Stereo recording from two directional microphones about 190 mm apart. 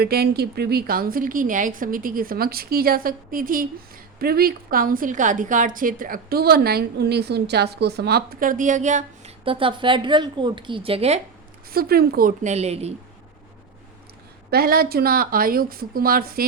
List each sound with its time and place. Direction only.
0.0 s a woman's voice: 55° right (ahead or behind); by 11.2 s 30° right (ahead or behind)
11.7 s a woman's voice: 55° right (ahead or behind); by 12.9 s 35° right (ahead or behind)
14.5 s a woman's voice: 50° right (ahead or behind)